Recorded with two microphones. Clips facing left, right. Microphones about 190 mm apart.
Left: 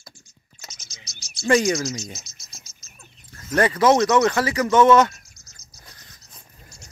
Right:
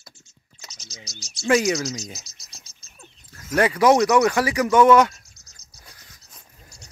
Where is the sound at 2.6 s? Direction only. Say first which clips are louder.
Right 2 dB; 35° right (ahead or behind).